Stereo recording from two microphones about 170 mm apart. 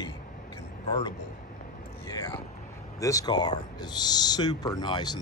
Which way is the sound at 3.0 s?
20° left (ahead or behind).